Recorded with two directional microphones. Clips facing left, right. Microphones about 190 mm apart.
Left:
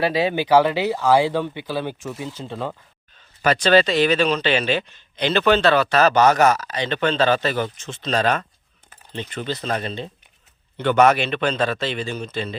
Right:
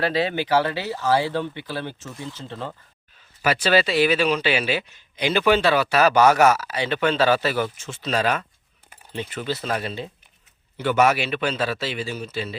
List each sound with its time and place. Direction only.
0.0 s speech: 15° left (ahead or behind)
3.4 s speech: 10° right (ahead or behind)
8.9 s a sound: 10° right (ahead or behind)
9.5 s speech: 5° right (ahead or behind)